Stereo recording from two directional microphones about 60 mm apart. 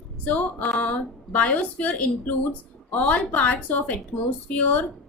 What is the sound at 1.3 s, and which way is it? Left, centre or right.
A woman's voice, left.